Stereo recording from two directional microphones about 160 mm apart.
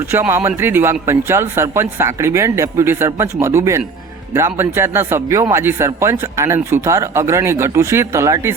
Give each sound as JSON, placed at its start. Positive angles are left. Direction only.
{"t": 0.1, "sound": "a man's voice", "side_deg": -15}